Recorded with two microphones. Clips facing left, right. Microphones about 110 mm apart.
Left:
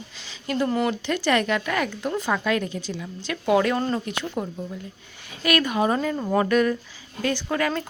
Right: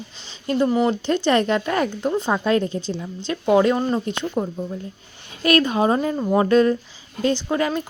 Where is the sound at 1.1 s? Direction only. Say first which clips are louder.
Right 3 dB; 30° right (ahead or behind).